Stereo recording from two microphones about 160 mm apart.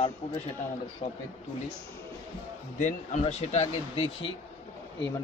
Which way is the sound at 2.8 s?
50° left (ahead or behind).